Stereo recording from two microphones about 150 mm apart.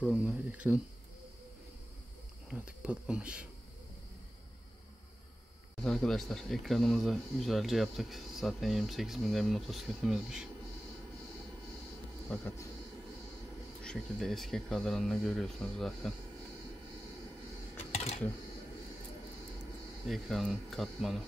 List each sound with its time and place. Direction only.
0.0 s speech: 5° right (ahead or behind)
2.5 s speech: 10° right (ahead or behind)
5.8 s speech: 5° left (ahead or behind)
12.3 s speech: 15° left (ahead or behind)
13.8 s speech: centre (ahead or behind)
17.9 s a sound: 45° left (ahead or behind)
20.1 s speech: centre (ahead or behind)